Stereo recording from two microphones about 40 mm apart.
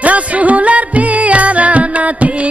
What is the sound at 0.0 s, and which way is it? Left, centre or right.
Music, right.